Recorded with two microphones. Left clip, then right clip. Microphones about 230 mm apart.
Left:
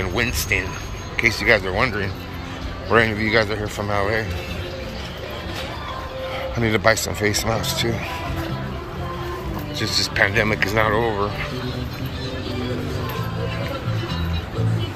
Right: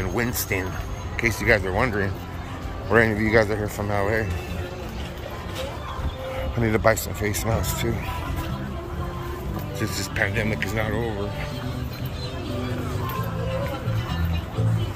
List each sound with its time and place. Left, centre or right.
0.0 s speech: centre
6.5 s speech: centre
9.8 s speech: centre